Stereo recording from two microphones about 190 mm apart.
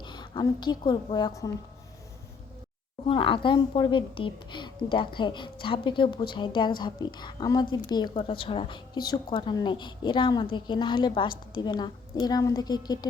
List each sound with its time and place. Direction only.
0.0 s a woman's voice: 25° left (ahead or behind)
3.1 s a woman's voice: 25° left (ahead or behind)